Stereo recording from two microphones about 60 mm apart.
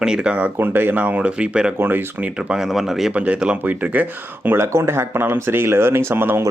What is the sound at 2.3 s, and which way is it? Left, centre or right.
Speech, centre.